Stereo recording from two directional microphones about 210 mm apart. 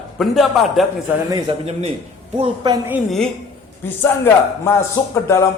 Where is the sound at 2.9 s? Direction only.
Centre (ahead or behind).